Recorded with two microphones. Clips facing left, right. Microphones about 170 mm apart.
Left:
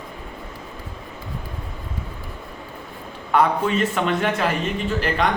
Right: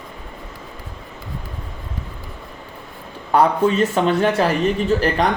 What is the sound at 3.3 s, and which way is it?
A man's voice, 35° right (ahead or behind).